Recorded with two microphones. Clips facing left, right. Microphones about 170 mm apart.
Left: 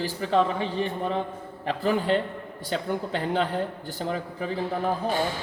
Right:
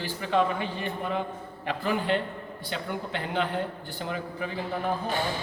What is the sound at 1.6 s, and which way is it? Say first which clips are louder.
A man's voice: left 3 dB; 35° left (ahead or behind).